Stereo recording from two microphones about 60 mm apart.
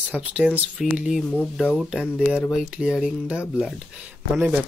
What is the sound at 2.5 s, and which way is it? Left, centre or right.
Speech, centre.